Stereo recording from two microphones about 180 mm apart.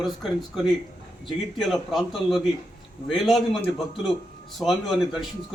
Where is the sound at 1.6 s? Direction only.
Centre (ahead or behind).